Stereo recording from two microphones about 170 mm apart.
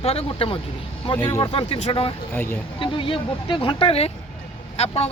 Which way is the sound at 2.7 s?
30° left (ahead or behind).